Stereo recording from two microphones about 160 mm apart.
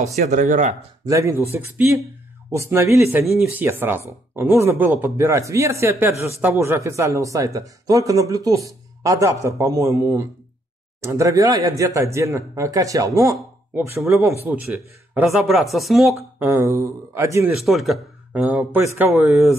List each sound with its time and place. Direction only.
0.0 s speech: 45° right (ahead or behind)
1.0 s speech: 20° right (ahead or behind); by 16.1 s centre (ahead or behind)
16.3 s speech: 15° right (ahead or behind)
17.6 s speech: centre (ahead or behind)